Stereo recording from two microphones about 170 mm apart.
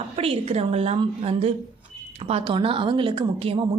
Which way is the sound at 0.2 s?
35° right (ahead or behind).